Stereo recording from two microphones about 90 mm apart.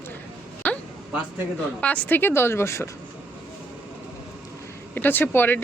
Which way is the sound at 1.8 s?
20° left (ahead or behind).